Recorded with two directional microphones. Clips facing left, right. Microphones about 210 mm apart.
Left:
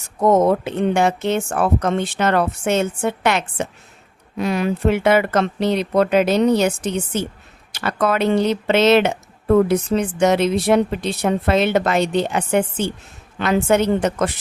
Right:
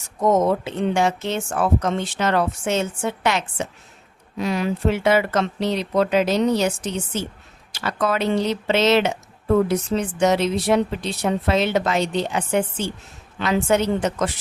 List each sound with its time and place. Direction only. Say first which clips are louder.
0.2 s speech: left 3 dB; 60° left (ahead or behind)